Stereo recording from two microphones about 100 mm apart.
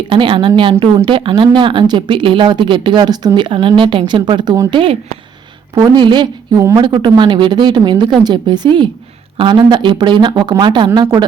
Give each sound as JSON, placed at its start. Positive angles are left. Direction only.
{"t": 0.1, "sound": "a woman's voice", "side_deg": -60}
{"t": 4.7, "sound": "a woman's voice", "side_deg": -60}
{"t": 5.7, "sound": "a woman's voice", "side_deg": -40}